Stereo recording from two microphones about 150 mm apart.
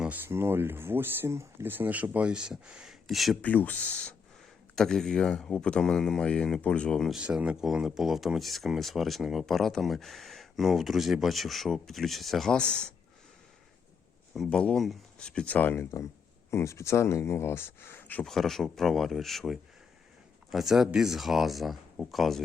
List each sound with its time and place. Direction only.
0.0 s speech: 10° right (ahead or behind)
3.5 s speech: 10° left (ahead or behind)
14.3 s speech: 5° left (ahead or behind)
18.2 s speech: centre (ahead or behind)